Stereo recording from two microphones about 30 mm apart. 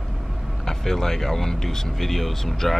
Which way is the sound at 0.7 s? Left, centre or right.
Centre.